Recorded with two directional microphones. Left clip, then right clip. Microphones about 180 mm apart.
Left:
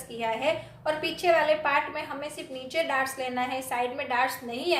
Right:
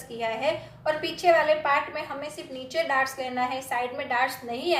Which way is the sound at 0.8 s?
25° left (ahead or behind).